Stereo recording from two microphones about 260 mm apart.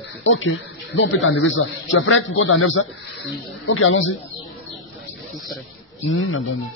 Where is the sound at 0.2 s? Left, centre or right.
Left.